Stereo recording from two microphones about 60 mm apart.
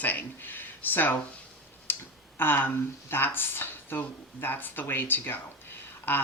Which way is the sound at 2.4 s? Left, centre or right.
Left.